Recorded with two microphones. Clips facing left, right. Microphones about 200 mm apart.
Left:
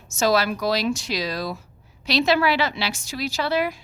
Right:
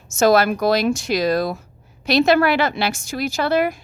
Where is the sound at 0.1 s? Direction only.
50° right (ahead or behind).